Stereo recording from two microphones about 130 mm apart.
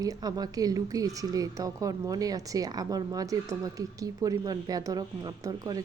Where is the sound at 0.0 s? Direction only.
30° right (ahead or behind).